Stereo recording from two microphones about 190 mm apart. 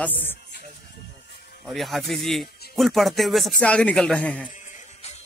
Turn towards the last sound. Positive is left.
turn(degrees=35)  # may be behind; listen again after turning